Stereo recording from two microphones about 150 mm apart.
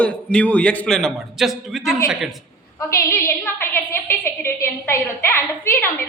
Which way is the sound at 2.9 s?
15° left (ahead or behind).